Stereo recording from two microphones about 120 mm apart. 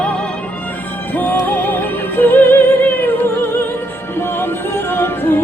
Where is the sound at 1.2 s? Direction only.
15° left (ahead or behind).